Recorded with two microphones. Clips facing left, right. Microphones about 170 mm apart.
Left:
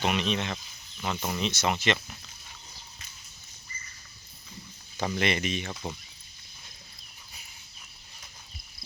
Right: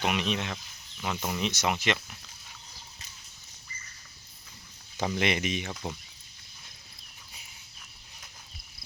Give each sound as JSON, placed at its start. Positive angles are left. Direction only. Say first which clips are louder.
{"t": 0.0, "sound": "speech", "louder": "left 1 dB", "side_deg": -10}
{"t": 1.4, "sound": "speech", "louder": "left 1 dB", "side_deg": -15}
{"t": 4.9, "sound": "speech", "louder": "even", "side_deg": -15}
{"t": 5.7, "sound": "speech", "louder": "even", "side_deg": 5}